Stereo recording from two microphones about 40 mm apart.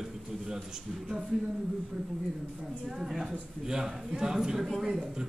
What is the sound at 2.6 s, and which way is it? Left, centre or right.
Speech, right.